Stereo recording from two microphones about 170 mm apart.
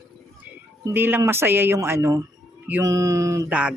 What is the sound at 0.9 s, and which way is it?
Speech, 10° right (ahead or behind).